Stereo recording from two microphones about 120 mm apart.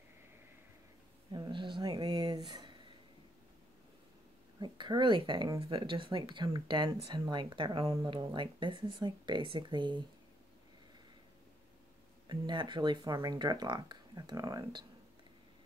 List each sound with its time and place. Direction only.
1.3 s speech: 40° right (ahead or behind)
2.3 s a sound: 35° right (ahead or behind)
4.6 s speech: 40° right (ahead or behind)
12.3 s speech: 40° right (ahead or behind)